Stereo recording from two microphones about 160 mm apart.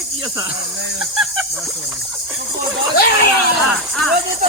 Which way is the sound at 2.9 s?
80° left.